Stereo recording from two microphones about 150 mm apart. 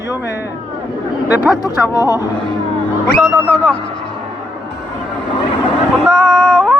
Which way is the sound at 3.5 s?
5° left (ahead or behind).